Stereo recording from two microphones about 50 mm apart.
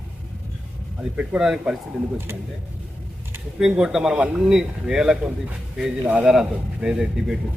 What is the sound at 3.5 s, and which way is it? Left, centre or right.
A man's voice, centre.